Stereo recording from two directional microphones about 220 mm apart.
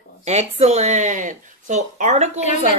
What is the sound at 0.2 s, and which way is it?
Speech, 30° right (ahead or behind).